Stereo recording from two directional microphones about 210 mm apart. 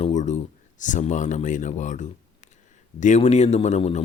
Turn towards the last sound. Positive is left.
turn(degrees=35)  # may be behind; listen again after turning